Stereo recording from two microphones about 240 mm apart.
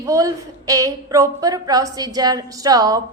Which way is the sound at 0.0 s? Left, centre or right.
Centre.